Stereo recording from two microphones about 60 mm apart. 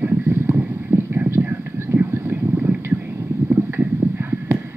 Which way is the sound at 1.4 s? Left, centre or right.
Right.